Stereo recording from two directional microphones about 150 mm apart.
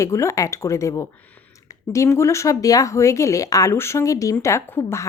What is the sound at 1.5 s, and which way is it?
A woman's voice, 20° left (ahead or behind).